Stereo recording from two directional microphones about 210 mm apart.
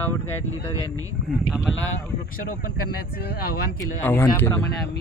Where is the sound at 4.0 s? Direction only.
10° left (ahead or behind).